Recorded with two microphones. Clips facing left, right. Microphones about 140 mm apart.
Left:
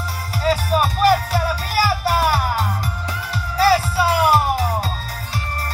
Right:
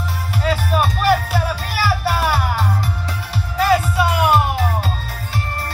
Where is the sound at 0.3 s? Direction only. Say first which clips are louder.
Left 1 dB; 40° left (ahead or behind).